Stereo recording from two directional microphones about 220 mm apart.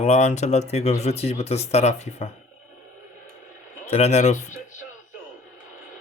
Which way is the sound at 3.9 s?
30° left (ahead or behind).